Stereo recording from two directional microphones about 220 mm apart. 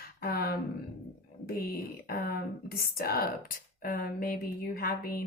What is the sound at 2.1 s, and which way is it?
Speech, 45° left (ahead or behind).